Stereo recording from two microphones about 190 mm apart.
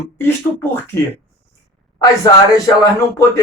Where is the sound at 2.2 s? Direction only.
15° left (ahead or behind).